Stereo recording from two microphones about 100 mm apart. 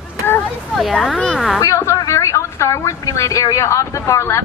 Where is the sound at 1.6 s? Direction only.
25° left (ahead or behind).